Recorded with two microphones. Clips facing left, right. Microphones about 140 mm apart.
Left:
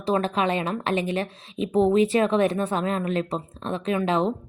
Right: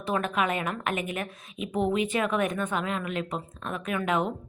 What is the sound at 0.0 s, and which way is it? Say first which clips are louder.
A woman's voice: left 4 dB; 30° left (ahead or behind).